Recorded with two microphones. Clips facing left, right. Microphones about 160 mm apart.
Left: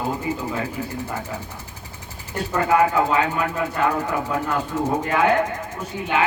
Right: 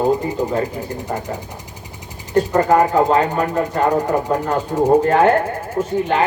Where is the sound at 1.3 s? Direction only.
40° right (ahead or behind).